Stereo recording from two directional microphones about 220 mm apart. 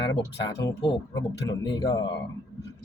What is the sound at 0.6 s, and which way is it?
Speech, 15° left (ahead or behind).